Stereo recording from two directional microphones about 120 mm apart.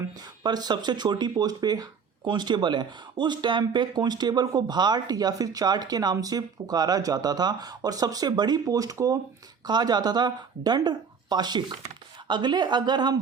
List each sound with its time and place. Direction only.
0.2 s speech: 35° right (ahead or behind)